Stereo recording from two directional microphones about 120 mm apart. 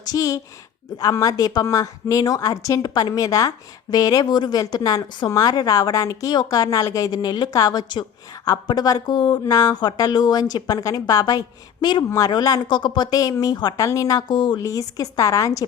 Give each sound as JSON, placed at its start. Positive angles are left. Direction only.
{"t": 0.0, "sound": "a woman's voice", "side_deg": 30}
{"t": 14.6, "sound": "a woman's voice", "side_deg": 30}